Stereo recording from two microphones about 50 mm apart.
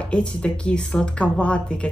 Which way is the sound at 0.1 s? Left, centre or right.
Left.